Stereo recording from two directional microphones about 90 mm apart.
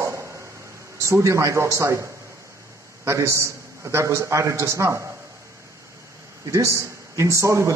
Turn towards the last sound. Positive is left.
turn(degrees=-35)  # may be behind; listen again after turning